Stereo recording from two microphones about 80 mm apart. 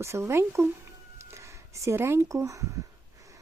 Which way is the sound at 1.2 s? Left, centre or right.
Right.